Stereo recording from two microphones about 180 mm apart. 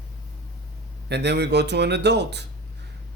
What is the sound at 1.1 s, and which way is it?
Speech, 70° right (ahead or behind).